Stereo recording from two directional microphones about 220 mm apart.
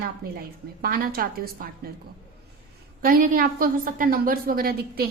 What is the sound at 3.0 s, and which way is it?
A woman's voice, 40° right (ahead or behind).